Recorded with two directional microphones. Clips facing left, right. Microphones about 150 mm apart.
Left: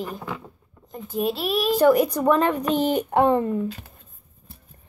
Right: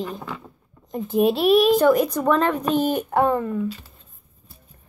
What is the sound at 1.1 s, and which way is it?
Speech, 60° right (ahead or behind).